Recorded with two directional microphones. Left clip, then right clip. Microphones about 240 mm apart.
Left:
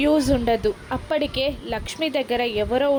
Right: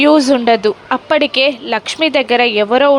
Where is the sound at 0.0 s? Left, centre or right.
Centre.